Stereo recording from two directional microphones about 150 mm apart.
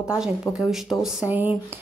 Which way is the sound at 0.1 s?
5° right (ahead or behind).